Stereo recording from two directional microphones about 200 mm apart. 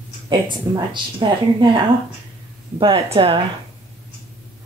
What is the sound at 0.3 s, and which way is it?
Speech, 20° right (ahead or behind).